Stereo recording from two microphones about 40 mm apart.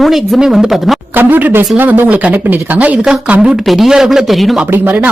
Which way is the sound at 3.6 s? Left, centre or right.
Centre.